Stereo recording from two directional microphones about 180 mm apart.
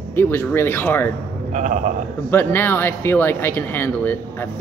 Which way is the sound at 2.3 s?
10° left (ahead or behind).